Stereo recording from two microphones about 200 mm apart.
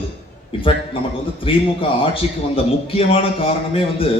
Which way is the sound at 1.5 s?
25° left (ahead or behind).